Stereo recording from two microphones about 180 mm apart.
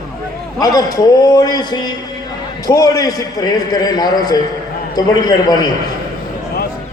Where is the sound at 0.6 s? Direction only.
20° left (ahead or behind).